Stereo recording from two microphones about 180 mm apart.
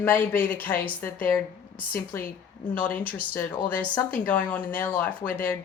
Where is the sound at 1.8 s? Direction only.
55° left (ahead or behind).